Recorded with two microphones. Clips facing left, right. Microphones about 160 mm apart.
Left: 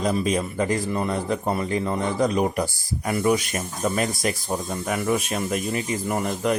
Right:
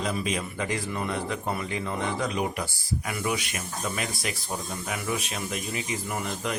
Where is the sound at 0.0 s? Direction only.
40° left (ahead or behind).